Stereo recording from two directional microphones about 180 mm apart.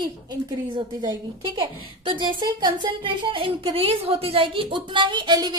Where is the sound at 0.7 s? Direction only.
25° right (ahead or behind).